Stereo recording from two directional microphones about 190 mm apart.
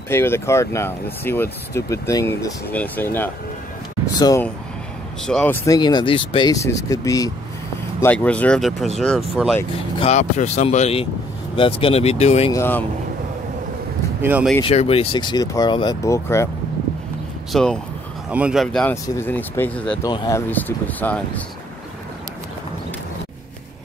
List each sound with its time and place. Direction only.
0.1 s speech: 15° left (ahead or behind)
5.2 s speech: 5° left (ahead or behind)
5.7 s speech: 25° left (ahead or behind); by 9.7 s 5° left (ahead or behind)
9.9 s speech: 35° left (ahead or behind)
12.5 s speech: 10° left (ahead or behind)
14.2 s speech: 10° right (ahead or behind)
14.6 s speech: 30° left (ahead or behind); by 16.4 s 15° left (ahead or behind)
17.5 s speech: centre (ahead or behind)
20.0 s speech: 20° left (ahead or behind)